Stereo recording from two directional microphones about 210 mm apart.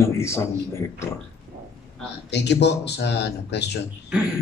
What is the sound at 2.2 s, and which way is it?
Speech, 55° left (ahead or behind).